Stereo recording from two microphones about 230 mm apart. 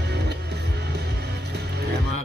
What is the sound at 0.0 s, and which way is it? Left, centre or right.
Music, right.